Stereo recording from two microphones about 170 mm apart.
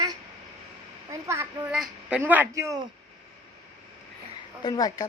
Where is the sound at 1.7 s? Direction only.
5° right (ahead or behind).